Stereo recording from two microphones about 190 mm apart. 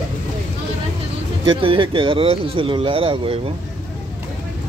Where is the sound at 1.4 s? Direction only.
25° right (ahead or behind).